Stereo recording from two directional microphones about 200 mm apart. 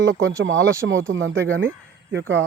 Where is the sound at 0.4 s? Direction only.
70° right (ahead or behind).